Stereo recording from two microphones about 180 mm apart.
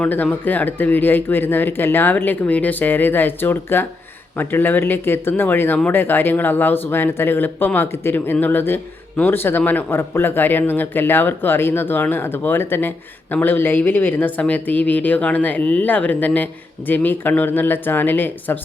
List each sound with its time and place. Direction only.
0.0 s speech: 10° left (ahead or behind)